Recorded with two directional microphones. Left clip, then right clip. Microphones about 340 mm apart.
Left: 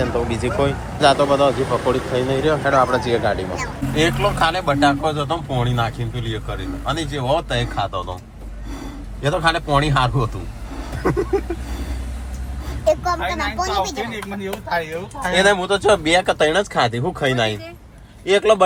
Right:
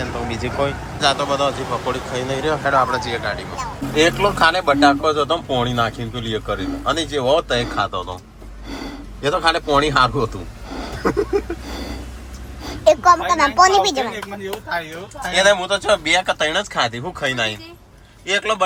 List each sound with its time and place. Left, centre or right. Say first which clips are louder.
0.0 s speech: left 4 dB; centre
3.9 s a man's voice: right 3 dB; centre
9.2 s speech: right 1 dB; centre
12.8 s speech: right 6 dB; right
15.3 s speech: right 1 dB; centre